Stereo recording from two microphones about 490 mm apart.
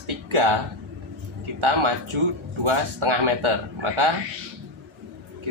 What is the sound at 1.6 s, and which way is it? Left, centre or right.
A man's voice, right.